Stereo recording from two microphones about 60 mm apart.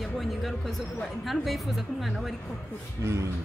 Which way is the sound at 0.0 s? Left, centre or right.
Centre.